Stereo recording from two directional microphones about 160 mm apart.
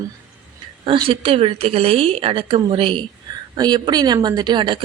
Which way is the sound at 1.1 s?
35° right (ahead or behind).